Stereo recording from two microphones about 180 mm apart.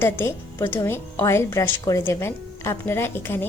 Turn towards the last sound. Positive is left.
turn(degrees=15)  # may be behind; listen again after turning